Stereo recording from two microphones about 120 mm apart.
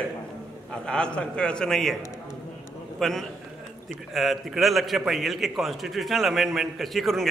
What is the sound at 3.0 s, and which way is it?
A man's voice, centre (ahead or behind).